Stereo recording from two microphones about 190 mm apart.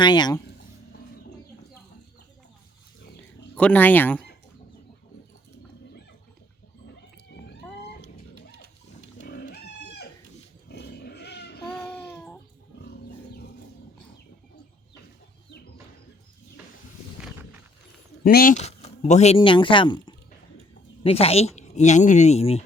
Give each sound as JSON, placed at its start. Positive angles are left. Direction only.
{"t": 0.0, "sound": "speech", "side_deg": 25}
{"t": 3.5, "sound": "speech", "side_deg": 5}
{"t": 7.3, "sound": "vehicle", "side_deg": 65}
{"t": 9.3, "sound": "livestock", "side_deg": 60}
{"t": 10.7, "sound": "pig", "side_deg": 60}
{"t": 11.9, "sound": "a sound", "side_deg": 5}
{"t": 18.2, "sound": "speech", "side_deg": 50}
{"t": 19.4, "sound": "speech", "side_deg": 25}